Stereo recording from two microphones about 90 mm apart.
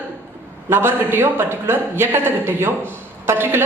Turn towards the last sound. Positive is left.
turn(degrees=-25)  # may be behind; listen again after turning